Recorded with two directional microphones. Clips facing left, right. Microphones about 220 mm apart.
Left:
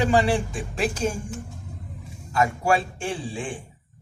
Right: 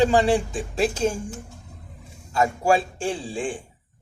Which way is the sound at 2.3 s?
30° right (ahead or behind).